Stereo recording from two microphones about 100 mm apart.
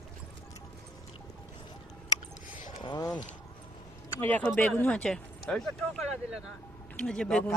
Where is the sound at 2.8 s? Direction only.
40° left (ahead or behind).